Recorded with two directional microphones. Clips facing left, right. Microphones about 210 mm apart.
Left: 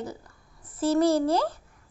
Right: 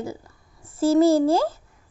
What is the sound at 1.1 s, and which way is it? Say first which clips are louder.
Speech: right 5 dB; 25° right (ahead or behind).